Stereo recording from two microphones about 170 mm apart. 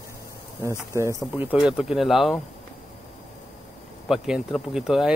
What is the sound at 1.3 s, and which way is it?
Speech, 5° right (ahead or behind).